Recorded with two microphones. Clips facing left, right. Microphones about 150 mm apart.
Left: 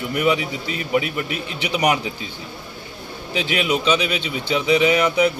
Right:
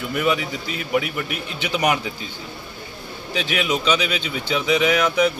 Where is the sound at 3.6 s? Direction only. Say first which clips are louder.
Left 2 dB; 10° left (ahead or behind).